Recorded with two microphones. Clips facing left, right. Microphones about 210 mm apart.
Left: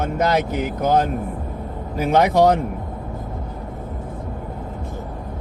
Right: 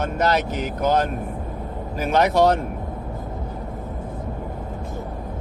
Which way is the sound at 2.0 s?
15° left (ahead or behind).